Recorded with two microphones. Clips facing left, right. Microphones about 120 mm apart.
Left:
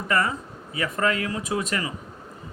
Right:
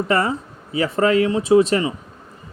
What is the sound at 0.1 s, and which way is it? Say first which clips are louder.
Speech: right 1 dB; 30° right (ahead or behind).